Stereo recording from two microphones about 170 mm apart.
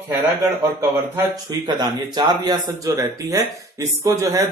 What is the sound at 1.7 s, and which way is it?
Speech, 25° right (ahead or behind).